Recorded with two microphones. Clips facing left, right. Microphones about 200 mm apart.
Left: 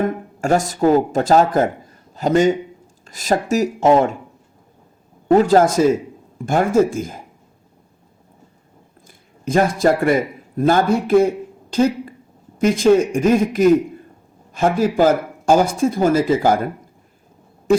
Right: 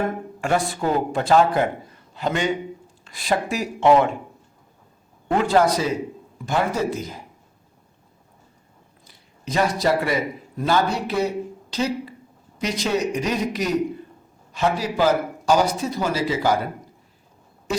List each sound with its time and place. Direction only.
0.4 s a man's voice: 40° left (ahead or behind)
5.3 s speech: 40° left (ahead or behind)
9.0 s a man's voice: 50° left (ahead or behind)